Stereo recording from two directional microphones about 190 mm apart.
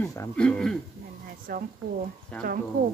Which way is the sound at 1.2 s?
50° right (ahead or behind).